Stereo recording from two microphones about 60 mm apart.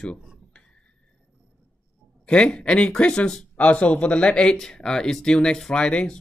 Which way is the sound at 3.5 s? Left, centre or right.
Left.